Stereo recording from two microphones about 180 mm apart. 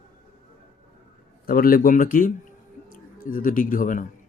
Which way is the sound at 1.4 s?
55° left (ahead or behind).